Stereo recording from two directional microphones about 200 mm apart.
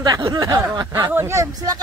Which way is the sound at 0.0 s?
20° right (ahead or behind).